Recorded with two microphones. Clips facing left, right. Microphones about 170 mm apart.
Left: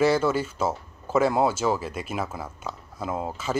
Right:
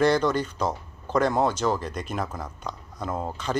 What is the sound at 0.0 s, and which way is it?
Speech, 5° left (ahead or behind).